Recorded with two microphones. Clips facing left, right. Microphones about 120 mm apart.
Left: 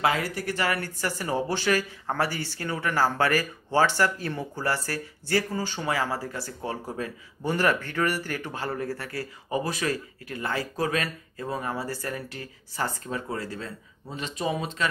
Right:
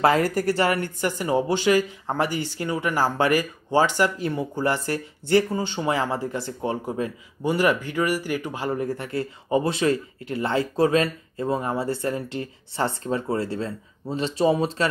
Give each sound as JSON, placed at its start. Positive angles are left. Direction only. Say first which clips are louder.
{"t": 0.0, "sound": "speech", "louder": "right 6 dB", "side_deg": -40}
{"t": 0.6, "sound": "speech", "louder": "right 5 dB", "side_deg": -25}